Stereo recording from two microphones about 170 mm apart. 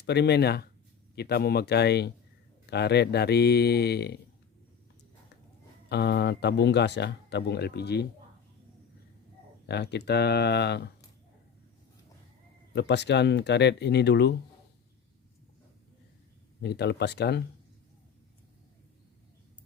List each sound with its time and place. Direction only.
0.0 s speech: 80° left
5.9 s speech: 80° left
9.6 s speech: 80° left
12.7 s speech: 90° left
16.6 s speech: 75° left (ahead or behind)